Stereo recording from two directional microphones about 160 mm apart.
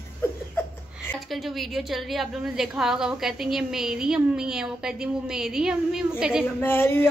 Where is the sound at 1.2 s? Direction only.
Centre (ahead or behind).